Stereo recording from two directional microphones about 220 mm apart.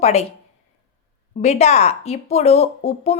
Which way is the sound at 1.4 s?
30° left (ahead or behind).